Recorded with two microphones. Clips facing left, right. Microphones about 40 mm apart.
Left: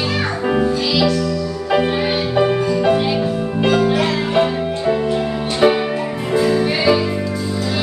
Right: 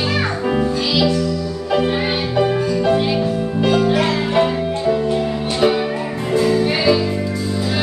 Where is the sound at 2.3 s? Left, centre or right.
Centre.